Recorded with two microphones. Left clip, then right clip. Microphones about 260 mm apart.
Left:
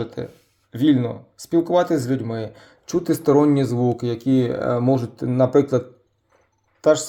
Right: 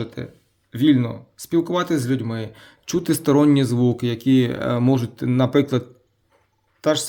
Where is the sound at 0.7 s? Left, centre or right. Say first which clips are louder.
Even; right.